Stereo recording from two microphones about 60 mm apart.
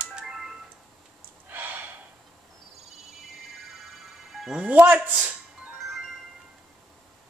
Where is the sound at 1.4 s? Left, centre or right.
Right.